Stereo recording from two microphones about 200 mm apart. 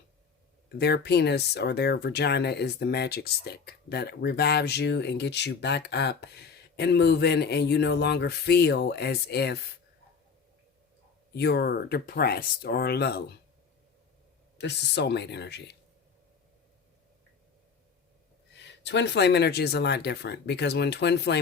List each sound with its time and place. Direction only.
0.8 s speech: 55° left (ahead or behind)
11.3 s speech: 55° left (ahead or behind)
14.6 s speech: 60° left (ahead or behind)
18.6 s speech: 60° left (ahead or behind)